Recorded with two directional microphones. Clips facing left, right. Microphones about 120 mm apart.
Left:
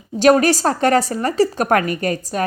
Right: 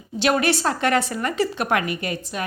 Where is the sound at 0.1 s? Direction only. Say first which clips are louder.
Left 7 dB; 40° left (ahead or behind).